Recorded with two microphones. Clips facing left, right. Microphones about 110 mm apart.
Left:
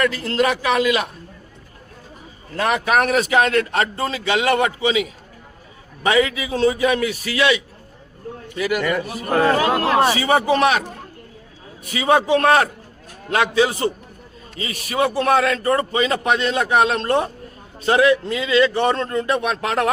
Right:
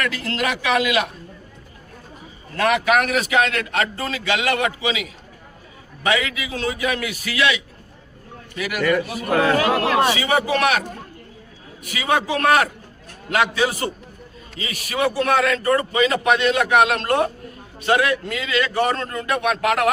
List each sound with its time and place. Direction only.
0.0 s a man's voice: 35° left (ahead or behind)
2.6 s a man's voice: 35° left (ahead or behind)
9.0 s a man's voice: 35° left (ahead or behind)
11.8 s a man's voice: 30° left (ahead or behind)